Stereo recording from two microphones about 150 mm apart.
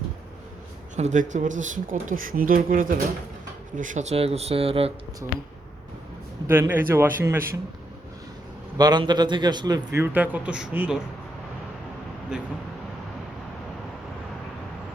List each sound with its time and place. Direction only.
0.9 s speech: 50° right (ahead or behind); by 3.0 s 65° right (ahead or behind)
3.8 s speech: 55° right (ahead or behind); by 4.9 s 40° right (ahead or behind)
6.5 s speech: 15° right (ahead or behind)
8.8 s a man's voice: 30° right (ahead or behind); by 11.0 s 5° right (ahead or behind)